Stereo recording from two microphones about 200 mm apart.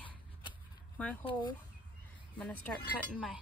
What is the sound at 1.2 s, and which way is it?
Speech, 25° left (ahead or behind).